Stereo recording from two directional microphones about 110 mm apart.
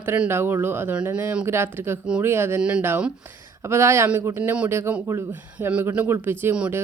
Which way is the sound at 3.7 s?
25° right (ahead or behind).